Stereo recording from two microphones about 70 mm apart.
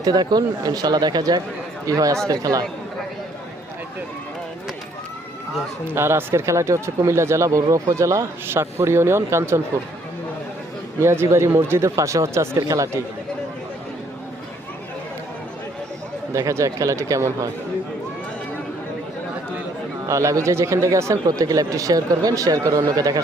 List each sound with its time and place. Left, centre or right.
0.0 s speech: right
1.9 s speech: right
5.9 s speech: right
11.0 s speech: right
16.3 s speech: right
20.1 s speech: right